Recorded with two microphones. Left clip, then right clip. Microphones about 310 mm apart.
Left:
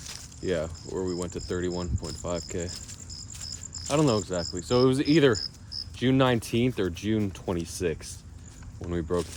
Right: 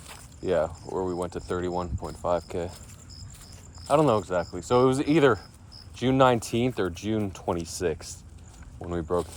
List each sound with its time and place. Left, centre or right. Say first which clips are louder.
0.0 s speech: even; centre
3.8 s speech: right 3 dB; centre
8.8 s speech: right 1 dB; centre